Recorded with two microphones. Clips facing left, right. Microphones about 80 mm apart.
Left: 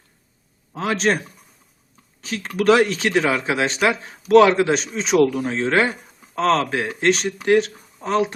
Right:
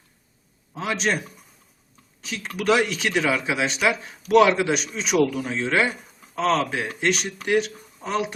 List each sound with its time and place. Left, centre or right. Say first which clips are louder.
0.7 s speech: left 4 dB; left
2.2 s speech: left 6 dB; left